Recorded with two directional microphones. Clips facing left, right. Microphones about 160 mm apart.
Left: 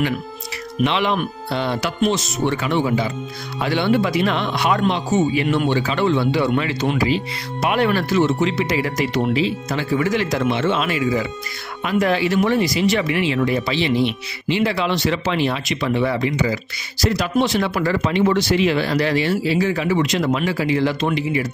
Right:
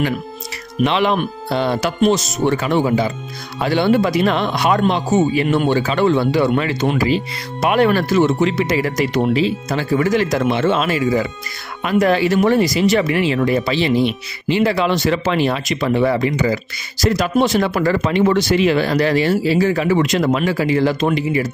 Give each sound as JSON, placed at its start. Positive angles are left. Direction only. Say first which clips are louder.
{"t": 0.8, "sound": "speech", "louder": "right 3 dB", "side_deg": -40}